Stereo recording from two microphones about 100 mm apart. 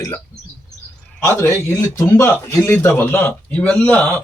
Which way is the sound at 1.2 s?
25° left (ahead or behind).